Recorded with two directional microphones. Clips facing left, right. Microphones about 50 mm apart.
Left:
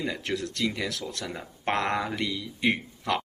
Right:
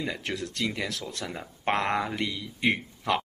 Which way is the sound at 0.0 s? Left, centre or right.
Centre.